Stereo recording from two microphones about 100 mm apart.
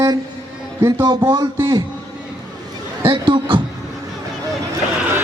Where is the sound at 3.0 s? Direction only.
50° right (ahead or behind).